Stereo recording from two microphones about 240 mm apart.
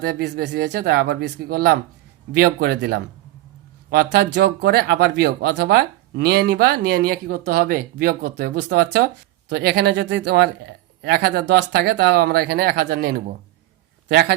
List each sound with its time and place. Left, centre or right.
0.0 s speech: right